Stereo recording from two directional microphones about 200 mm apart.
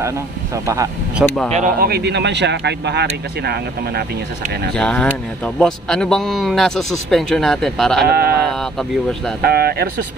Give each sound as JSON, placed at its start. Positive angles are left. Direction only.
{"t": 1.1, "sound": "speech", "side_deg": 5}
{"t": 1.5, "sound": "a man's voice", "side_deg": -45}
{"t": 4.7, "sound": "speech", "side_deg": 5}
{"t": 8.0, "sound": "speech", "side_deg": -50}
{"t": 9.4, "sound": "speech", "side_deg": -50}